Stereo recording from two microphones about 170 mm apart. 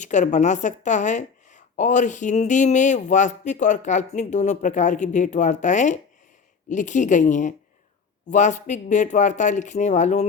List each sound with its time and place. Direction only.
0.0 s a woman's voice: 45° left (ahead or behind)